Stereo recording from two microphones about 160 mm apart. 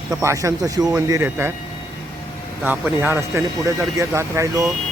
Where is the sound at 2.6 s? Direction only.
10° right (ahead or behind).